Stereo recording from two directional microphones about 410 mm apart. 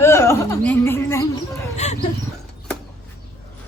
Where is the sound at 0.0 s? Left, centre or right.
Centre.